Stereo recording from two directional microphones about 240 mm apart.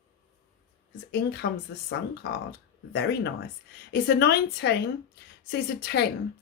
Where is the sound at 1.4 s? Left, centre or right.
Left.